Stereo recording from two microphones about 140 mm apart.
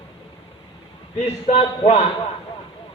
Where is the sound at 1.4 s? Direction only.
45° left (ahead or behind).